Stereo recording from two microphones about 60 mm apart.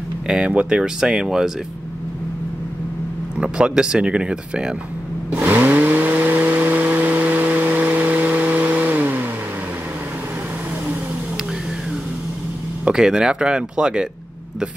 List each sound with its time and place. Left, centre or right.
0.3 s speech: centre
3.3 s speech: centre
5.3 s vehicle: right
12.9 s speech: centre